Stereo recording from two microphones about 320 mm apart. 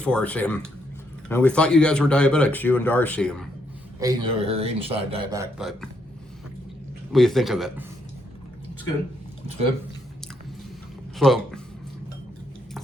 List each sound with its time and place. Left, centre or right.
0.0 s speech: centre
4.0 s speech: centre
7.1 s speech: centre
11.2 s speech: centre